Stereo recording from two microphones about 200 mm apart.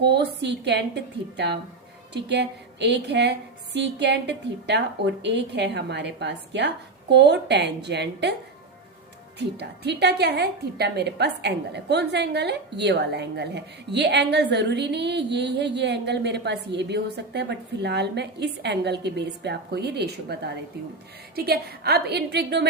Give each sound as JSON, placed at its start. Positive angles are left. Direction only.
{"t": 0.0, "sound": "a woman's voice", "side_deg": -55}
{"t": 9.6, "sound": "a woman's voice", "side_deg": -55}